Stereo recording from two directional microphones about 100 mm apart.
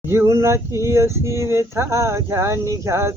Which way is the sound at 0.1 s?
30° right (ahead or behind).